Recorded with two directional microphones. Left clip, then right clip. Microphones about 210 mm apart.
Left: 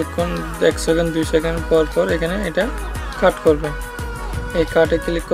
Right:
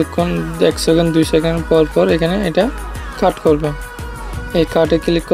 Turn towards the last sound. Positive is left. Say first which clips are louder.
# right 4 dB
turn(degrees=-20)  # may be behind; listen again after turning